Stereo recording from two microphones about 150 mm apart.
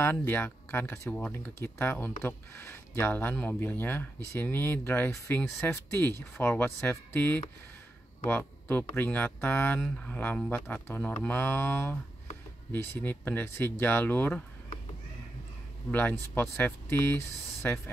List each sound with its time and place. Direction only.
0.0 s speech: 15° left (ahead or behind)
15.9 s speech: 10° left (ahead or behind)